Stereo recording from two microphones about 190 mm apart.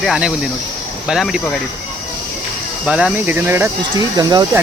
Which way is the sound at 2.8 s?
5° right (ahead or behind).